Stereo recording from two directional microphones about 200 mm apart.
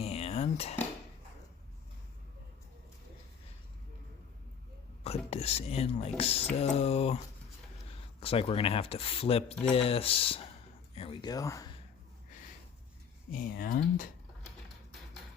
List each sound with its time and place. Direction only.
0.0 s cutlery: 30° left (ahead or behind)
5.0 s speech: 30° left (ahead or behind)
8.2 s speech: 30° left (ahead or behind)
13.3 s speech: 45° left (ahead or behind)